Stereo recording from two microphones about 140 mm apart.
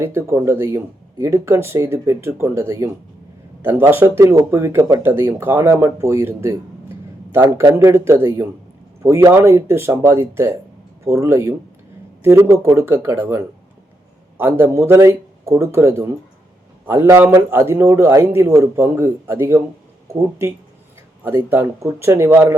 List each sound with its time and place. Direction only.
0.0 s a man's voice: 20° right (ahead or behind)
21.2 s a man's voice: 15° right (ahead or behind)